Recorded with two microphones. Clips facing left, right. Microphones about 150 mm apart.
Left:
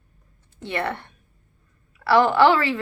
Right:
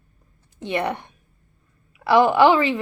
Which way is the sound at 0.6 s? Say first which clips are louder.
Right 3 dB; 15° right (ahead or behind).